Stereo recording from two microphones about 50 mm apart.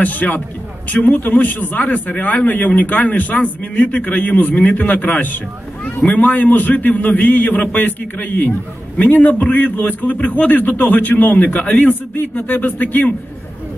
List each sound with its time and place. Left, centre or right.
0.0 s a man's voice: left
12.2 s a man's voice: left